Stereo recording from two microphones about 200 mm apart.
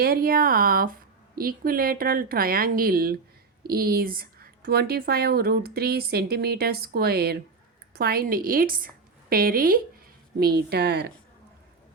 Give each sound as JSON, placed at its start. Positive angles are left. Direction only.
{"t": 0.0, "sound": "speech", "side_deg": -50}